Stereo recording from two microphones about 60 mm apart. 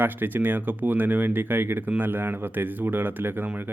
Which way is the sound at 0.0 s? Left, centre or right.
Right.